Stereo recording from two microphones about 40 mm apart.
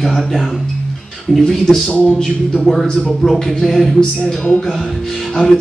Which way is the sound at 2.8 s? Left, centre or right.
Left.